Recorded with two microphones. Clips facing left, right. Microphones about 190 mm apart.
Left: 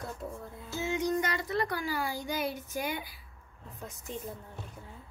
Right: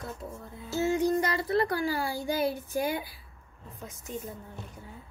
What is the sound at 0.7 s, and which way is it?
Child singing, 35° right (ahead or behind).